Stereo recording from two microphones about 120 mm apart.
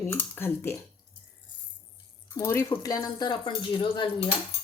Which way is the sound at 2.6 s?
30° left (ahead or behind).